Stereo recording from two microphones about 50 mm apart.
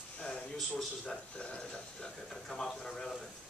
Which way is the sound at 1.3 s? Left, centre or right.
Centre.